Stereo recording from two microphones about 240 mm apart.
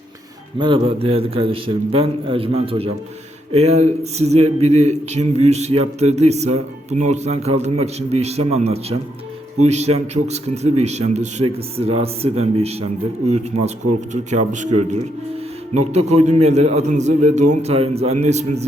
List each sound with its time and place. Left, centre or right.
0.6 s a man's voice: right